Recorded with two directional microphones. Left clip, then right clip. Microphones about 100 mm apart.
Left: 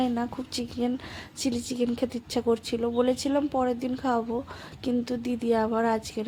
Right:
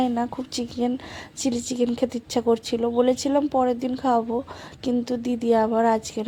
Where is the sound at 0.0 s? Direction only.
35° right (ahead or behind).